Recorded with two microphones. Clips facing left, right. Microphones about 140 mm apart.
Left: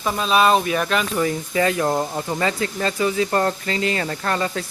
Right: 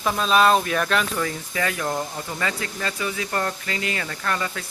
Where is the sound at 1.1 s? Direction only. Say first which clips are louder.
Left 6 dB; 25° left (ahead or behind).